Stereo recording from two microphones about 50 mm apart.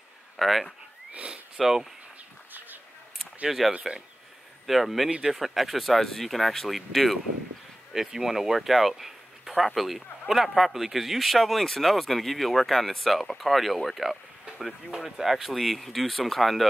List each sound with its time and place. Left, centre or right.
0.4 s speech: centre
1.1 s a sound: right
1.6 s speech: centre
3.4 s speech: centre